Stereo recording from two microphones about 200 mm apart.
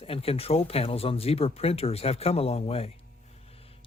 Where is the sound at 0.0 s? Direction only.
30° left (ahead or behind).